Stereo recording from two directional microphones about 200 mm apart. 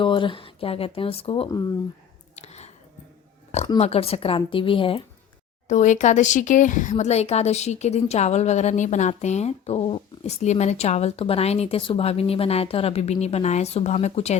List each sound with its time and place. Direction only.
0.0 s speech: 25° left (ahead or behind)
2.3 s whispering: 35° left (ahead or behind)
3.8 s speech: 30° left (ahead or behind)
5.6 s speech: 40° left (ahead or behind)